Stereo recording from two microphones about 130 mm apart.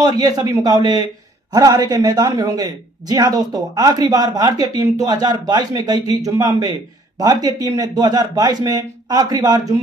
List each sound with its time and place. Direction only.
0.0 s a man's voice: 30° right (ahead or behind)